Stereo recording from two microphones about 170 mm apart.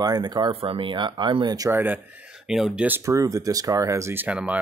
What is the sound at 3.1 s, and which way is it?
Speech, 20° right (ahead or behind).